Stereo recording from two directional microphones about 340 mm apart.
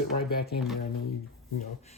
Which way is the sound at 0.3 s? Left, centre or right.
Left.